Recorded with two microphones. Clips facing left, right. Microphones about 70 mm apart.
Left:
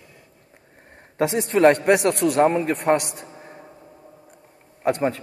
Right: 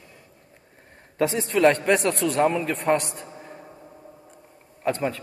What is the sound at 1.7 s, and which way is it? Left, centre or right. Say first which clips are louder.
Speech: left 3 dB; left.